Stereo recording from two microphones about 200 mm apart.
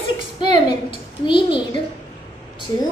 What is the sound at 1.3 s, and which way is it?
Speech, 25° left (ahead or behind).